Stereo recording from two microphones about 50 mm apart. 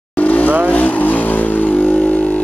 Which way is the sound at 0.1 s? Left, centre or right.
Left.